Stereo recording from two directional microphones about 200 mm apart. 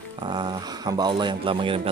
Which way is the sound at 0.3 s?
20° right (ahead or behind).